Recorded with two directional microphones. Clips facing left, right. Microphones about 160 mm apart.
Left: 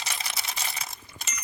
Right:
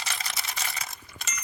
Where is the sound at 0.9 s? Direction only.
30° left (ahead or behind).